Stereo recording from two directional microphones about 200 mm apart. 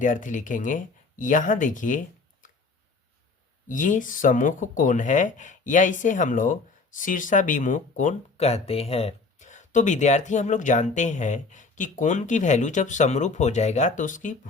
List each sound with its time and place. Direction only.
0.0 s speech: 40° left (ahead or behind)
3.7 s speech: 40° left (ahead or behind)